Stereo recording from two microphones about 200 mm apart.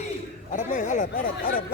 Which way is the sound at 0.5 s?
40° left (ahead or behind).